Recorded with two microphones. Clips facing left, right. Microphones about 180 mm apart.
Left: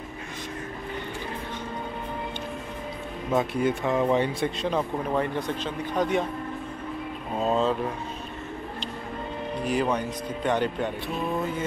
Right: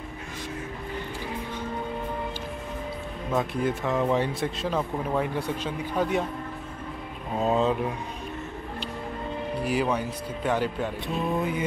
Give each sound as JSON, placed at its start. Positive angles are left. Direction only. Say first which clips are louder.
{"t": 3.3, "sound": "speech", "louder": "left 2 dB", "side_deg": 0}
{"t": 7.3, "sound": "speech", "louder": "right 1 dB", "side_deg": -15}
{"t": 9.6, "sound": "speech", "louder": "left 1 dB", "side_deg": -5}